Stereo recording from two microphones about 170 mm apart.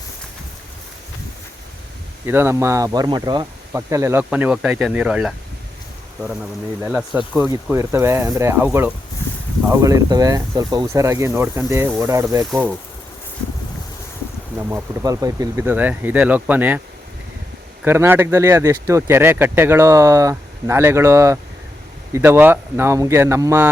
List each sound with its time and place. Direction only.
2.2 s speech: 15° right (ahead or behind)
14.7 s speech: 15° right (ahead or behind)
17.8 s speech: 15° right (ahead or behind)